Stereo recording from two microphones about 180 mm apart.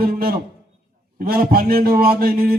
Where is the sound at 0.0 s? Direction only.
55° right (ahead or behind).